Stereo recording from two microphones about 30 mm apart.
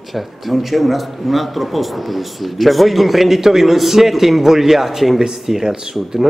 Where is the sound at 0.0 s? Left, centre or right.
Centre.